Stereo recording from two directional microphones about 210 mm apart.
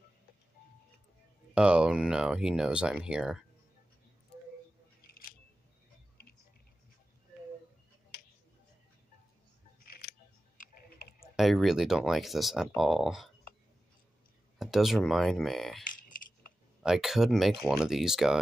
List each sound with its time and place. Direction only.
1.5 s speech: 5° right (ahead or behind)
9.8 s music: 45° left (ahead or behind)
11.3 s speech: centre (ahead or behind)
14.6 s a sound: centre (ahead or behind)
15.0 s speech: centre (ahead or behind)
16.8 s speech: centre (ahead or behind)